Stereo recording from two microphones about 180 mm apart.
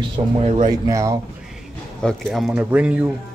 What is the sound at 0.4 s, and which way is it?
Speech, 35° right (ahead or behind).